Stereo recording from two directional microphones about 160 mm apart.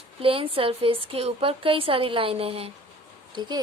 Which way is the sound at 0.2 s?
35° right (ahead or behind).